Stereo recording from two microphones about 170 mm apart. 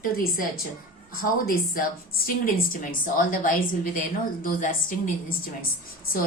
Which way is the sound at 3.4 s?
55° left (ahead or behind).